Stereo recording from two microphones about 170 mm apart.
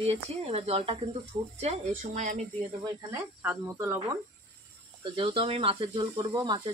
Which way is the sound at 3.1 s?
10° right (ahead or behind).